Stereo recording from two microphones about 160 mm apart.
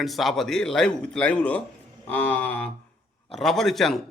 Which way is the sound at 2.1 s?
10° left (ahead or behind).